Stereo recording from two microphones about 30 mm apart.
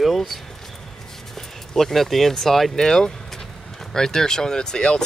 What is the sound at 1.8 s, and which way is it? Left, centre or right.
Speech, centre.